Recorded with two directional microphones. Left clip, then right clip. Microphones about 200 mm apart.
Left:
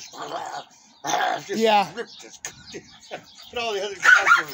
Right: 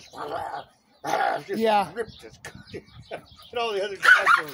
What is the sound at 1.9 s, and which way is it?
Speech, 30° right (ahead or behind).